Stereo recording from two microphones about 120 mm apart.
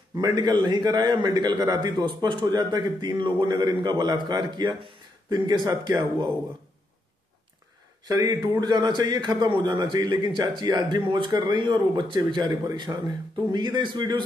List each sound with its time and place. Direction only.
0.1 s a man's voice: 35° right (ahead or behind)
8.0 s a man's voice: 30° right (ahead or behind)